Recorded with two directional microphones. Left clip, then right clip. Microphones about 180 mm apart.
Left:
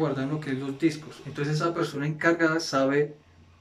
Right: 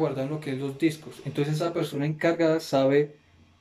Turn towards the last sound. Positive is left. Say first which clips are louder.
# right 2 dB
turn(degrees=-20)  # may be behind; listen again after turning